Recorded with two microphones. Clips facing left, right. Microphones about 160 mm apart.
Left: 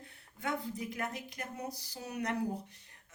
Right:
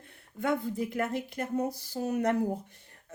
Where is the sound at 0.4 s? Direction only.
55° right (ahead or behind).